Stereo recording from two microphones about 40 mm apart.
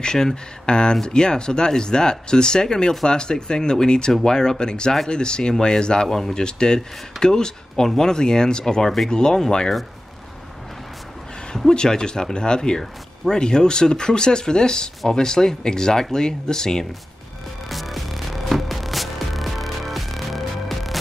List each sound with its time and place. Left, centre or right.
0.0 s speech: centre
6.0 s speech: centre
6.3 s speech: centre
11.5 s speech: centre
17.6 s music: centre